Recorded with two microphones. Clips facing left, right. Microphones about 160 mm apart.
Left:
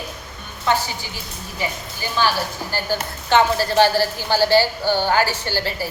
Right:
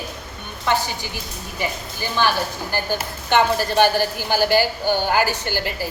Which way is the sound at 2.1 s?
15° right (ahead or behind).